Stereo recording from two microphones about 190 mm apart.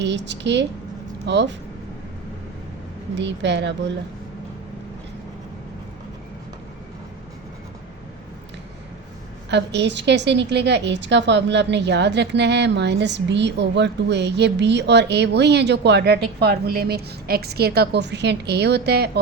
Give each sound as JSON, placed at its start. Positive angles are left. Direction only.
{"t": 0.0, "sound": "a woman's voice", "side_deg": -70}
{"t": 3.2, "sound": "a woman's voice", "side_deg": -70}
{"t": 9.5, "sound": "a woman's voice", "side_deg": -65}